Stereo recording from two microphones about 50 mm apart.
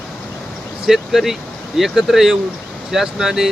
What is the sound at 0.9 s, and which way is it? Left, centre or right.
Speech, centre.